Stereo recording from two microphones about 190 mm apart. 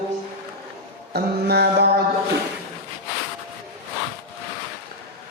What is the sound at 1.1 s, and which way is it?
Mantra, 60° right (ahead or behind).